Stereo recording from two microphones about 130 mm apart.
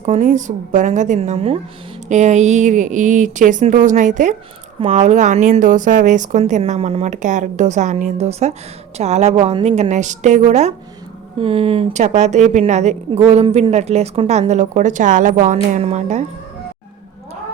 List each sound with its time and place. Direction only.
0.0 s a woman's voice: 60° right (ahead or behind)
2.0 s a woman's voice: 60° right (ahead or behind)
4.8 s a woman's voice: 55° right (ahead or behind); by 6.4 s 75° right (ahead or behind)
6.4 s a woman's voice: 55° right (ahead or behind)
9.9 s a woman's voice: 65° right (ahead or behind)
11.3 s speech: 45° right (ahead or behind)
11.9 s a woman's voice: 65° right (ahead or behind)